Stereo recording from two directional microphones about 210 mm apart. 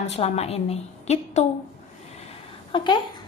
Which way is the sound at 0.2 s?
30° left (ahead or behind).